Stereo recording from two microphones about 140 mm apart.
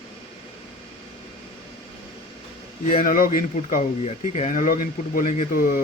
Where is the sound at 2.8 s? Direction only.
75° left (ahead or behind).